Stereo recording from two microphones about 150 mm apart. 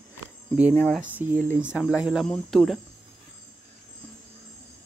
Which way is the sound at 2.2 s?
5° left (ahead or behind).